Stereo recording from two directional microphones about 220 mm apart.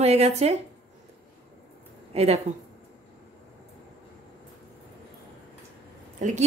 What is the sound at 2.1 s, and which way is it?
Speech, 30° right (ahead or behind).